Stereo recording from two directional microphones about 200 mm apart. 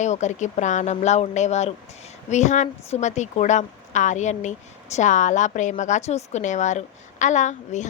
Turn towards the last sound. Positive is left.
turn(degrees=35)  # may be behind; listen again after turning